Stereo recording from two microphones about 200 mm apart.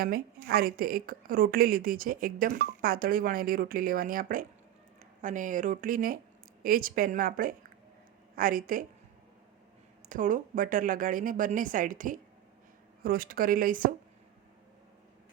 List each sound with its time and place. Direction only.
0.0 s a woman's voice: 45° right (ahead or behind)
10.1 s a woman's voice: 40° right (ahead or behind)